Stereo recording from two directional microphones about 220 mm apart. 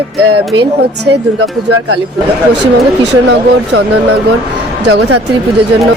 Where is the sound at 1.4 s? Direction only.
90° right.